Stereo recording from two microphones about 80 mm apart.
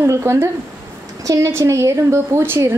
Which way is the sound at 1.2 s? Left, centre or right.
Right.